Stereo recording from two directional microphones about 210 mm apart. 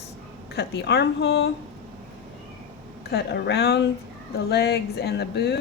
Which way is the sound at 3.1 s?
55° left (ahead or behind).